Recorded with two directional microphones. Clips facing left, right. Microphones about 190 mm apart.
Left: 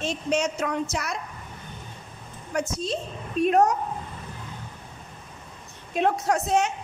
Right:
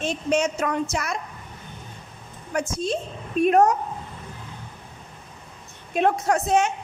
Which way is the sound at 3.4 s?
55° right (ahead or behind).